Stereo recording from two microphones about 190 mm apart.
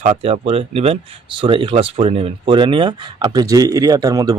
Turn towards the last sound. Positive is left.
turn(degrees=-20)  # may be behind; listen again after turning